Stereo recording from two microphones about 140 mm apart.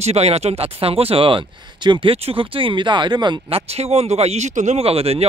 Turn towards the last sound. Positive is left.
turn(degrees=-45)  # may be behind; listen again after turning